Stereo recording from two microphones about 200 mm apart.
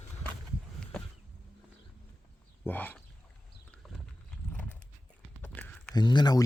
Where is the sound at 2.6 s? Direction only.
10° left (ahead or behind).